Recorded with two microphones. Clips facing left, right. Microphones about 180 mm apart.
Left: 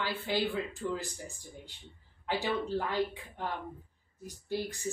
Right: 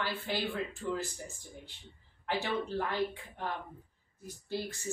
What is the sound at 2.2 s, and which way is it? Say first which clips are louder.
Speech: left 1 dB; 15° left (ahead or behind).